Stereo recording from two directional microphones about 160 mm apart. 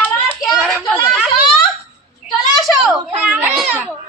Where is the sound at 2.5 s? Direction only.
Centre (ahead or behind).